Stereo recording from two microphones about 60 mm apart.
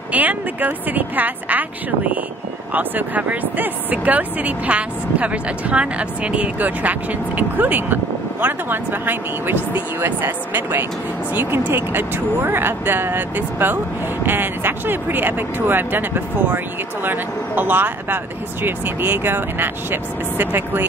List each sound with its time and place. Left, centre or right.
0.1 s speech: right